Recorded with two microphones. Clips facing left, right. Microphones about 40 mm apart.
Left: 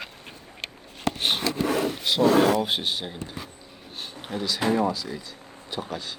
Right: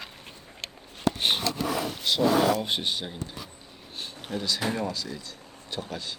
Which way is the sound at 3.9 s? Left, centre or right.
Centre.